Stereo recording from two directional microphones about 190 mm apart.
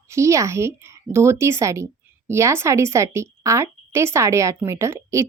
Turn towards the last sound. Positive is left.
turn(degrees=-15)  # may be behind; listen again after turning